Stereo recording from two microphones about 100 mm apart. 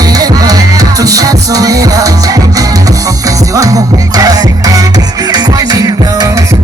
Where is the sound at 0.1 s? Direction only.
40° right (ahead or behind).